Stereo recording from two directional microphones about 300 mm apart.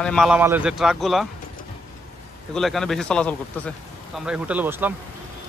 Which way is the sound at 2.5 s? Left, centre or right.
Centre.